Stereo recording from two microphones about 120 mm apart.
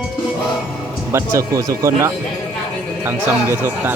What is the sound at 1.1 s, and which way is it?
Speech, 25° right (ahead or behind).